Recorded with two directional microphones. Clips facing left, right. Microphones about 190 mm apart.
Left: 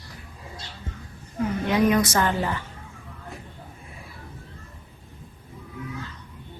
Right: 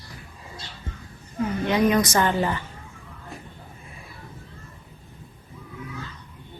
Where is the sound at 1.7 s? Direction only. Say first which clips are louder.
Even; 5° left (ahead or behind).